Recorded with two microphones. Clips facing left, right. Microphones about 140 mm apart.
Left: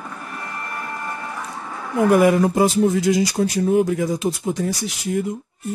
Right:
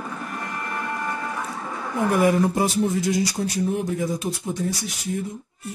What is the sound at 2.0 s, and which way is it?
Speech, 90° left.